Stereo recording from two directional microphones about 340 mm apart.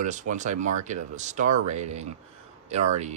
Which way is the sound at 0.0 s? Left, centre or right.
Right.